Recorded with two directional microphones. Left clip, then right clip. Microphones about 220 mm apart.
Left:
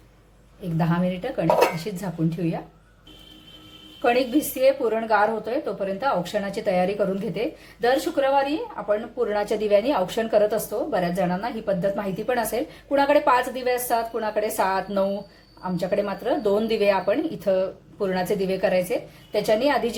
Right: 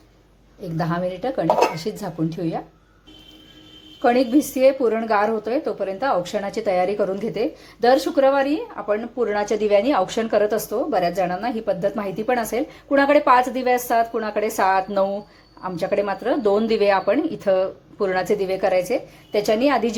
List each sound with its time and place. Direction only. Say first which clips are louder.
0.8 s speech: right 2 dB; 25° right (ahead or behind)
4.0 s speech: right 3 dB; 20° right (ahead or behind)